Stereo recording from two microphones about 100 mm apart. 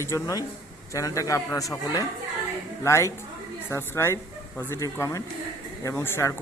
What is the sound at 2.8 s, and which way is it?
A man's voice, 30° left (ahead or behind).